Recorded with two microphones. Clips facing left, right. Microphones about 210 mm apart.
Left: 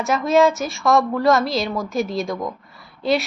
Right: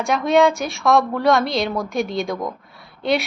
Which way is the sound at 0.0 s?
Centre (ahead or behind).